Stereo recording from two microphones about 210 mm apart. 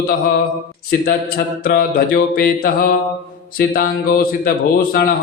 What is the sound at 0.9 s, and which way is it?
Mantra, 45° left (ahead or behind).